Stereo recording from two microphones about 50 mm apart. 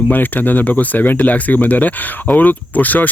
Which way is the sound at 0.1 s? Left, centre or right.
Left.